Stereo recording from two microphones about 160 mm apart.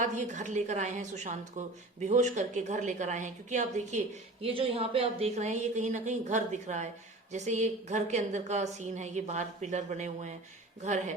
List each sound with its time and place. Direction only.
0.0 s a woman's voice: 50° right (ahead or behind)
4.4 s a woman's voice: 35° right (ahead or behind)